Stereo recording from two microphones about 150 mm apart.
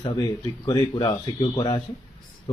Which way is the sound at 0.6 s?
30° left (ahead or behind).